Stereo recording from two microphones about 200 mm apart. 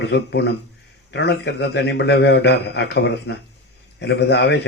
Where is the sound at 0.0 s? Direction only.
60° left (ahead or behind).